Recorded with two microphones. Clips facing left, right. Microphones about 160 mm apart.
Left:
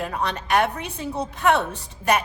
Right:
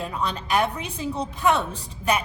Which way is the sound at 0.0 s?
65° left (ahead or behind).